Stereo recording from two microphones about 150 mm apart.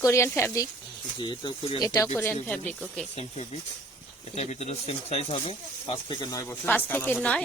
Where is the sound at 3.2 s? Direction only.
45° left (ahead or behind); by 7.4 s 10° left (ahead or behind).